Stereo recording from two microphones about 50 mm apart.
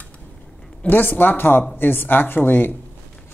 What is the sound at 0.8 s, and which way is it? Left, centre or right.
Speech, left.